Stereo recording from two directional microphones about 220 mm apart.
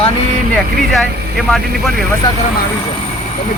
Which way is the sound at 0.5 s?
Centre (ahead or behind).